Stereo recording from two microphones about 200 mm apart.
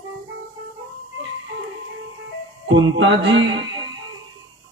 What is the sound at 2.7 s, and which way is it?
Music, 70° right (ahead or behind).